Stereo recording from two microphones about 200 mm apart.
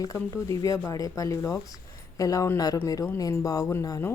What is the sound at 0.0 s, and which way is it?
Speech, 15° left (ahead or behind).